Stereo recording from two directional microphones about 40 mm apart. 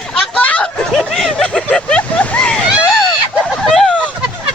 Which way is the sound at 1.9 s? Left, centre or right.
Left.